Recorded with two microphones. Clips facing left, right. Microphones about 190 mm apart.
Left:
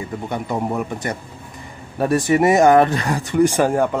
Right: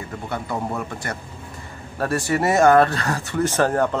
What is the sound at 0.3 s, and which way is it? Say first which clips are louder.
Speech: left 3 dB; 15° left (ahead or behind).